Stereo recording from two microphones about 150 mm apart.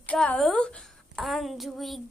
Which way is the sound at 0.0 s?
10° left (ahead or behind).